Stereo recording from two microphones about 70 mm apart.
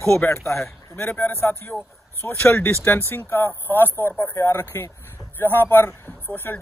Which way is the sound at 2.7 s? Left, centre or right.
Left.